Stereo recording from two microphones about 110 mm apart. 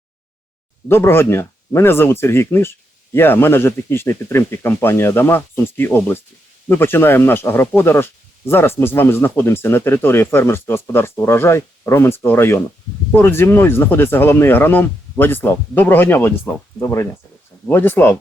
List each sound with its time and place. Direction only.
0.9 s speech: 20° left (ahead or behind)